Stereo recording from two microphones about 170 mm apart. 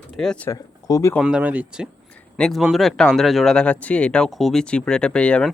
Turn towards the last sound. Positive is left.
turn(degrees=5)  # may be behind; listen again after turning